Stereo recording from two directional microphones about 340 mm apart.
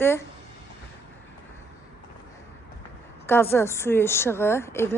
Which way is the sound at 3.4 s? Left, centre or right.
Centre.